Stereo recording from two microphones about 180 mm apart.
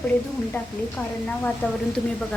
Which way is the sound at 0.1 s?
10° left (ahead or behind).